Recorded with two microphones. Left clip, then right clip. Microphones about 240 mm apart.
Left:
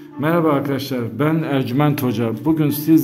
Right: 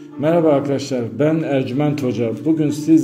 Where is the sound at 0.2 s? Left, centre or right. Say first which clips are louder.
Right 3 dB; centre.